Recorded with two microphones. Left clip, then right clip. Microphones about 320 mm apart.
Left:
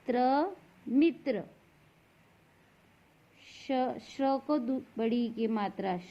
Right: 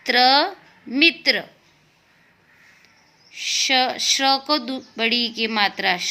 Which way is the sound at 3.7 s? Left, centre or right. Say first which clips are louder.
Right 11 dB; centre.